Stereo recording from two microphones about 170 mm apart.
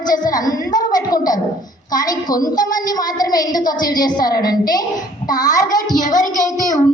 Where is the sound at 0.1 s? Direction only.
20° left (ahead or behind).